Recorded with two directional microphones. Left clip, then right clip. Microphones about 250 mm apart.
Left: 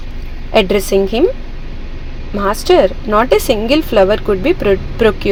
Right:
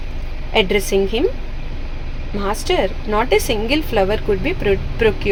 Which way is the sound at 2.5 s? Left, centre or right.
Left.